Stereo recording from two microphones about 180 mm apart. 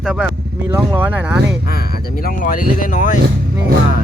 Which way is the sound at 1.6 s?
55° left (ahead or behind).